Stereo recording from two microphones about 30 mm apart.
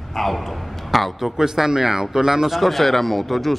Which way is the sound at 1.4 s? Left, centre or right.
Centre.